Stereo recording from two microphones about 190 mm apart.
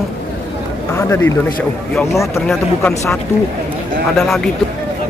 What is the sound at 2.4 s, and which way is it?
Speech, 10° left (ahead or behind).